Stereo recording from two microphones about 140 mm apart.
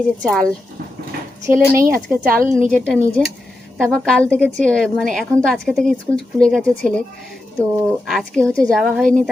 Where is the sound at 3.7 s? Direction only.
Centre (ahead or behind).